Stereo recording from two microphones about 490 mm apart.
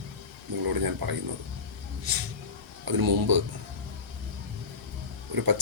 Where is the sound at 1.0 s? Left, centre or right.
Right.